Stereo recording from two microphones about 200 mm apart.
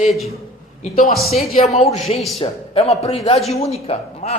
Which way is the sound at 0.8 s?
40° left (ahead or behind).